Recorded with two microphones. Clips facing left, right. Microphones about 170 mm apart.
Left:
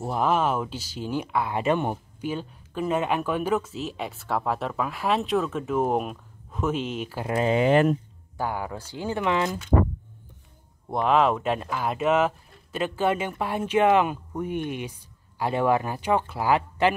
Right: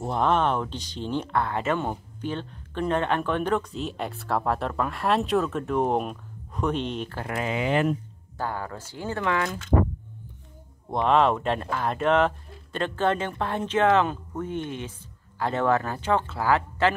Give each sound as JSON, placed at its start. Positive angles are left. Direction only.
{"t": 0.0, "sound": "speech", "side_deg": 5}
{"t": 7.2, "sound": "speech", "side_deg": 30}
{"t": 8.4, "sound": "speech", "side_deg": 15}
{"t": 10.9, "sound": "speech", "side_deg": 5}